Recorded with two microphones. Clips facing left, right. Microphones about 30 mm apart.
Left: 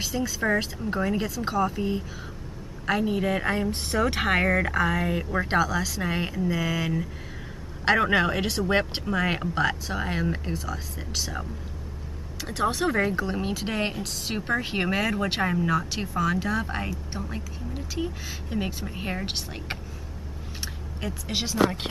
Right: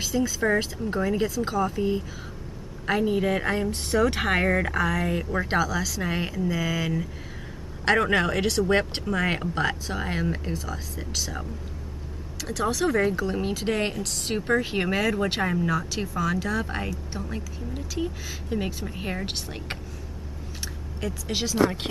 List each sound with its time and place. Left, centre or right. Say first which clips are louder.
0.0 s speech: right 2 dB; centre
3.9 s speech: right 1 dB; centre
4.7 s speech: left 1 dB; centre
5.0 s speech: even; centre
12.4 s speech: even; left; by 15.9 s centre
15.9 s speech: left 1 dB; centre
21.3 s speech: right 1 dB; centre